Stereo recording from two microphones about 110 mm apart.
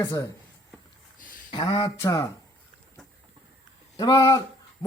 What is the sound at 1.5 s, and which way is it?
Speech, 45° left (ahead or behind).